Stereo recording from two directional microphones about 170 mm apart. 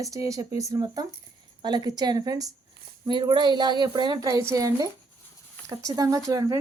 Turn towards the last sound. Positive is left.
turn(degrees=-20)  # may be behind; listen again after turning